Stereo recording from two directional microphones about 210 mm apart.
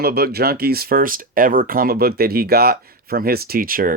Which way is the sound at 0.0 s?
50° right (ahead or behind).